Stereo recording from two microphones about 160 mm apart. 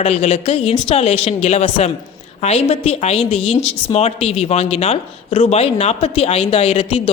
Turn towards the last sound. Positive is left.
turn(degrees=40)  # may be behind; listen again after turning